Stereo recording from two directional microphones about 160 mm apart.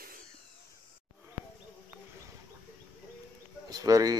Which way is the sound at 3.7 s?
20° right (ahead or behind).